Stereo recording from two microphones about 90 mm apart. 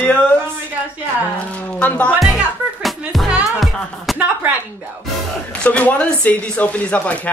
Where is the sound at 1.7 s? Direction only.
20° left (ahead or behind).